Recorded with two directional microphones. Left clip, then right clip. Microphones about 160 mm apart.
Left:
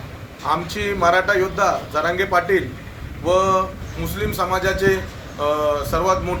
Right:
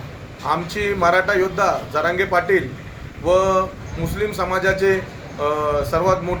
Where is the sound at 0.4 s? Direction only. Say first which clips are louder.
Right 1 dB; 5° left (ahead or behind).